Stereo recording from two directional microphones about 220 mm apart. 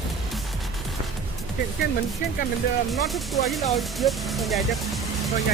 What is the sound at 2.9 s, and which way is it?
Speech, centre (ahead or behind).